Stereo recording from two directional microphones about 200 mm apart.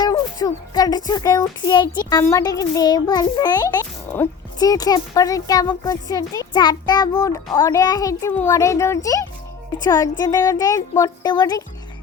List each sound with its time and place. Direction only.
0.0 s speech: 20° left (ahead or behind)